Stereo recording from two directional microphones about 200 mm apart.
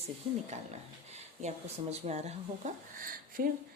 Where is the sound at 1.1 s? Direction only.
35° right (ahead or behind).